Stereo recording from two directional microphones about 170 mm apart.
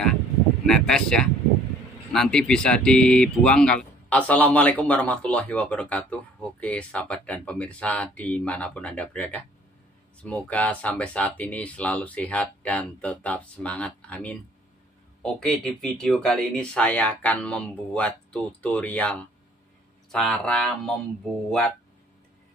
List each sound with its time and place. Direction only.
0.7 s speech: 5° left (ahead or behind)